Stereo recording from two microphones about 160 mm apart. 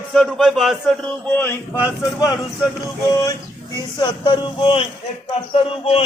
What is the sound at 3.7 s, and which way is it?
Speech, 25° left (ahead or behind).